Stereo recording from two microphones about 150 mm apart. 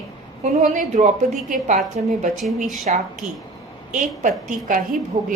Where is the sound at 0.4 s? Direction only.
60° right (ahead or behind).